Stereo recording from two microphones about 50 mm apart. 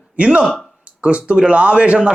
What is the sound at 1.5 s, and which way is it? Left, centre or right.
Speech, right.